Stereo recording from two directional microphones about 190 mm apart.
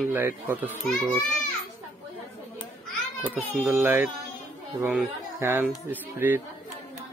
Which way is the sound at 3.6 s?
10° right (ahead or behind).